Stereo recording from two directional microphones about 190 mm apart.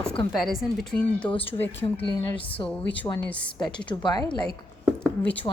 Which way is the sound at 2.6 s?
20° left (ahead or behind).